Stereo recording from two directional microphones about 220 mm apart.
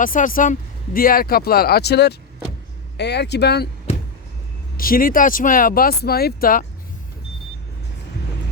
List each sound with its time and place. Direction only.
0.0 s speech: 40° left (ahead or behind)
4.8 s speech: 40° left (ahead or behind)